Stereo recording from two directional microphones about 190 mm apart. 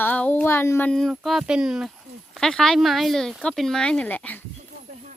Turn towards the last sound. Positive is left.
turn(degrees=10)  # may be behind; listen again after turning